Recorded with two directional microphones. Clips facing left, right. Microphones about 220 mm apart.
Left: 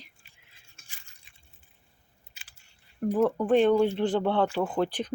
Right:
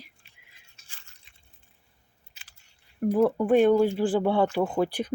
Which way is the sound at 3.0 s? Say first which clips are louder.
Right 2 dB; 10° right (ahead or behind).